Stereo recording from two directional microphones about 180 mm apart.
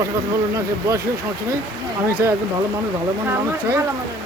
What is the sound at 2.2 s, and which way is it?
Speech, 15° right (ahead or behind).